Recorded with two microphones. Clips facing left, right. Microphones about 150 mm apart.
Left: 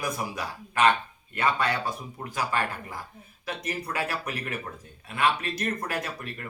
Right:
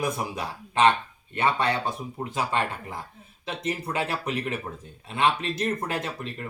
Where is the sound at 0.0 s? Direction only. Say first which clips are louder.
Right 3 dB; 25° right (ahead or behind).